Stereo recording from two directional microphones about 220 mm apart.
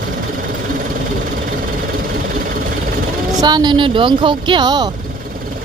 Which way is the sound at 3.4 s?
20° right (ahead or behind).